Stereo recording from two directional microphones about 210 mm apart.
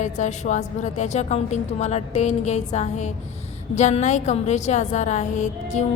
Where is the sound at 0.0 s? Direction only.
35° left (ahead or behind).